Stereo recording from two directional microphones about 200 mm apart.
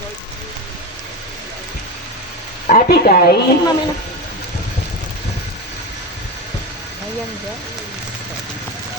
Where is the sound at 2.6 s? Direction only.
45° left (ahead or behind).